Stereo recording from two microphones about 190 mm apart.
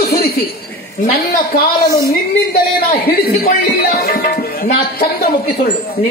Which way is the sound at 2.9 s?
55° left (ahead or behind).